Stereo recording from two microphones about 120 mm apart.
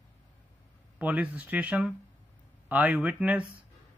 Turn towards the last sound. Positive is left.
turn(degrees=-10)  # may be behind; listen again after turning